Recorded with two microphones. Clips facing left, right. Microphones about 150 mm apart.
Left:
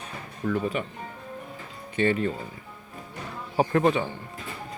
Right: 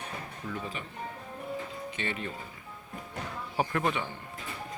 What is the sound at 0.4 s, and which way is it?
Speech, 75° left (ahead or behind).